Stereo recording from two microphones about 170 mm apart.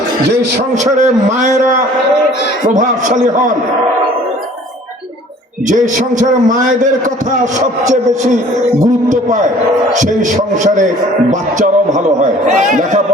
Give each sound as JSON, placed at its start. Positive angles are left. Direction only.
{"t": 0.9, "sound": "a man's voice", "side_deg": -45}
{"t": 5.6, "sound": "a man's voice", "side_deg": -50}